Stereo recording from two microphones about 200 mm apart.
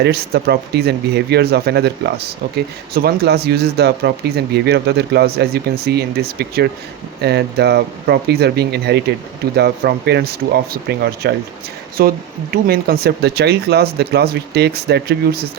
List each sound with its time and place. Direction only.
0.0 s speech: 55° right (ahead or behind)